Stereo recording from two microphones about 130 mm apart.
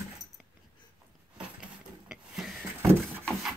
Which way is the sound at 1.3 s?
5° right (ahead or behind).